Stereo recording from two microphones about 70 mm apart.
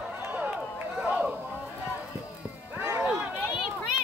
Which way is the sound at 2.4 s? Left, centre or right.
Right.